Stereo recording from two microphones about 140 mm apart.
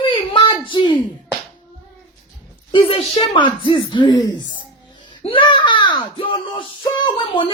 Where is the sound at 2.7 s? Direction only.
40° left (ahead or behind).